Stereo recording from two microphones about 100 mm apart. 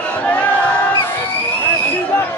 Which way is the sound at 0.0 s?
15° left (ahead or behind).